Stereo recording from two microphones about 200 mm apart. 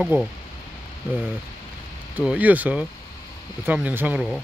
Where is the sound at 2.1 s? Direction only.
10° right (ahead or behind).